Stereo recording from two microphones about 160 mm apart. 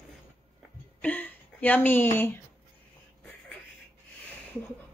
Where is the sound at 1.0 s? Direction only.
10° left (ahead or behind).